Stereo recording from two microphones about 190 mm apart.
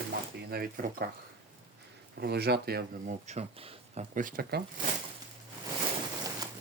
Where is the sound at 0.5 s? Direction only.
50° right (ahead or behind).